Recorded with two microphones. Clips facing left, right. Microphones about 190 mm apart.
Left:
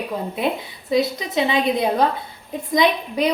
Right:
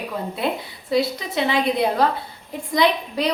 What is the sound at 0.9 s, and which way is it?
A woman's voice, 20° left (ahead or behind).